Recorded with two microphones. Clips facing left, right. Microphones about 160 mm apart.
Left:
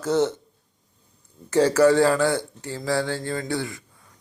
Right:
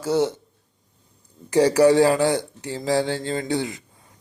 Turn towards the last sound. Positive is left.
turn(degrees=-20)  # may be behind; listen again after turning